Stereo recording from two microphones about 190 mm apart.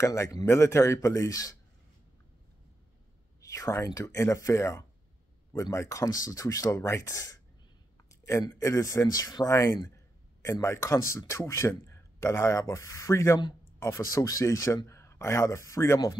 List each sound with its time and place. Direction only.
0.0 s speech: 15° left (ahead or behind)
3.3 s speech: 15° left (ahead or behind)